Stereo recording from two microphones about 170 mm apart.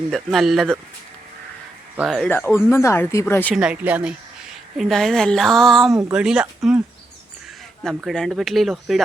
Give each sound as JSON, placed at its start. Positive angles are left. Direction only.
{"t": 0.1, "sound": "speech", "side_deg": 0}
{"t": 2.0, "sound": "speech", "side_deg": -5}
{"t": 2.2, "sound": "speech", "side_deg": 10}
{"t": 3.5, "sound": "a woman's voice", "side_deg": -5}
{"t": 5.9, "sound": "speech", "side_deg": -20}
{"t": 6.1, "sound": "speech", "side_deg": -5}
{"t": 7.9, "sound": "speech", "side_deg": 5}